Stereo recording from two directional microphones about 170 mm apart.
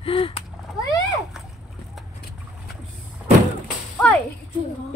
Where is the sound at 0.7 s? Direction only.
20° left (ahead or behind).